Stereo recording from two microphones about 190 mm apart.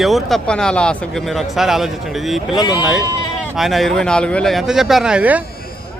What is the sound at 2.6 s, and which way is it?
Speech, 20° left (ahead or behind).